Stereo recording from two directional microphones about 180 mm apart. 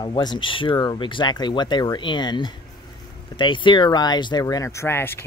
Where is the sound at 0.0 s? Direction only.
25° left (ahead or behind).